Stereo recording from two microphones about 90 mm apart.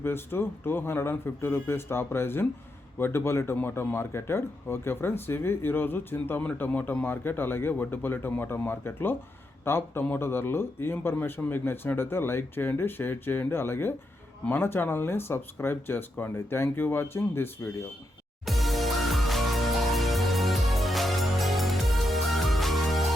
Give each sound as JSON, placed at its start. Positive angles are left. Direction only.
{"t": 0.0, "sound": "speech", "side_deg": 25}
{"t": 18.4, "sound": "music", "side_deg": 0}